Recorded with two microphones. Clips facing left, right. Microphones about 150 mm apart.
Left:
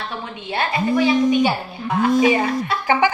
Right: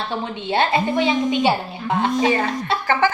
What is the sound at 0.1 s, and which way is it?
A woman's voice, 25° right (ahead or behind).